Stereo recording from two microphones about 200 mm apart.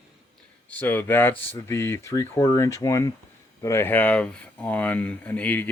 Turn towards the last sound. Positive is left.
turn(degrees=5)  # may be behind; listen again after turning